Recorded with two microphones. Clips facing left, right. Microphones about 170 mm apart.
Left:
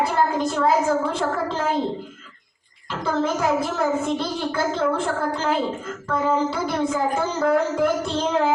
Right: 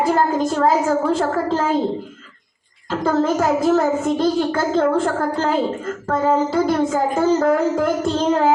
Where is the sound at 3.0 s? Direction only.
45° right (ahead or behind).